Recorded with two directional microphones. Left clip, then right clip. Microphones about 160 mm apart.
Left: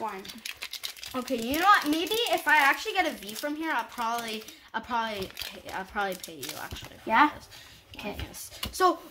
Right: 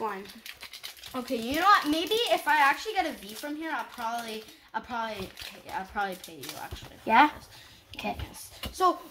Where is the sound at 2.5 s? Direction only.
30° left (ahead or behind).